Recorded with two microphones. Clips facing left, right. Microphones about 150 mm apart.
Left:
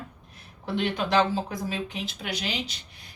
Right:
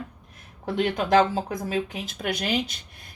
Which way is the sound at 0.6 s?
45° right (ahead or behind).